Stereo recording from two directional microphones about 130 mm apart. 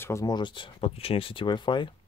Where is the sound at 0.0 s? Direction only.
25° left (ahead or behind).